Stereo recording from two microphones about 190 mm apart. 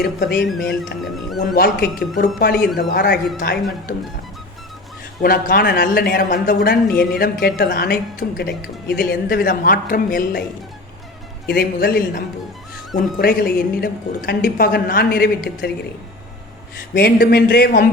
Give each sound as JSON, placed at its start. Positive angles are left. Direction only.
{"t": 0.0, "sound": "a woman's voice", "side_deg": 60}
{"t": 1.0, "sound": "speech", "side_deg": 0}
{"t": 1.5, "sound": "a woman's voice", "side_deg": 55}
{"t": 5.2, "sound": "a woman's voice", "side_deg": 50}
{"t": 11.4, "sound": "a woman's voice", "side_deg": 55}
{"t": 16.9, "sound": "a woman's voice", "side_deg": 50}